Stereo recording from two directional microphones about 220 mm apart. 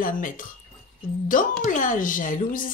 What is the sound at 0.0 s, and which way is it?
Speech, 35° left (ahead or behind).